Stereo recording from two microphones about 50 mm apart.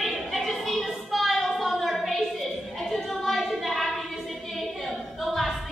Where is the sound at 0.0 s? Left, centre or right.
Centre.